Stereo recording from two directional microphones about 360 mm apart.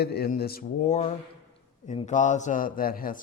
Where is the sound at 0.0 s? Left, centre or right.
Left.